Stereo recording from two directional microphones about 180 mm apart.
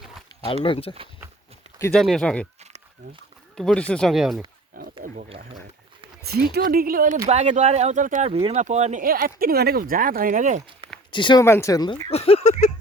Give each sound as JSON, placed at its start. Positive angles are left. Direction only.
{"t": 0.4, "sound": "speech", "side_deg": 30}
{"t": 1.9, "sound": "speech", "side_deg": 0}
{"t": 3.5, "sound": "speech", "side_deg": 5}
{"t": 4.7, "sound": "wild animals", "side_deg": -50}
{"t": 6.5, "sound": "speech", "side_deg": -55}
{"t": 7.3, "sound": "speech", "side_deg": -40}
{"t": 8.3, "sound": "speech", "side_deg": -30}
{"t": 11.1, "sound": "speech", "side_deg": 25}
{"t": 11.4, "sound": "speech", "side_deg": 15}
{"t": 12.1, "sound": "speech", "side_deg": 35}